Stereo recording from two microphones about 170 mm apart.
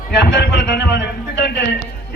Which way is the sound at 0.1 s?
80° left.